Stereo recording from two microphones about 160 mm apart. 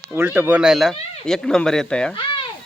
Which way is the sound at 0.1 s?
15° right (ahead or behind).